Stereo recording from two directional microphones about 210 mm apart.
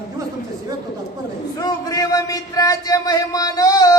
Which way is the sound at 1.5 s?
15° left (ahead or behind).